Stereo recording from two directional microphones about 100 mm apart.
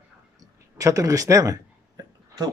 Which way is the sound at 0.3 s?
35° right (ahead or behind).